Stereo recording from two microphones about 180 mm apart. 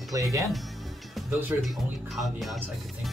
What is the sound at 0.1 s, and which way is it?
Speech, 20° right (ahead or behind).